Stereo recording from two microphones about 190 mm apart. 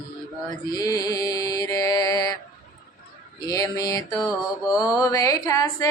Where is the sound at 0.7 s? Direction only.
20° left (ahead or behind).